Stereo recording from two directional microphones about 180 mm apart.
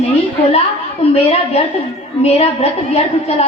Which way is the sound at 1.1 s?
35° left (ahead or behind).